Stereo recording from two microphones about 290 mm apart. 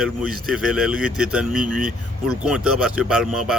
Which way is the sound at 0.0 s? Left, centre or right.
Centre.